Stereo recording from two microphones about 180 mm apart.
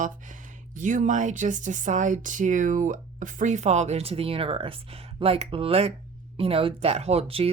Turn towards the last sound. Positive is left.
turn(degrees=-35)  # may be behind; listen again after turning